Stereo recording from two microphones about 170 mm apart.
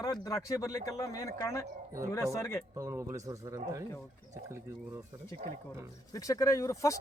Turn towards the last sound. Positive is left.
turn(degrees=20)  # may be behind; listen again after turning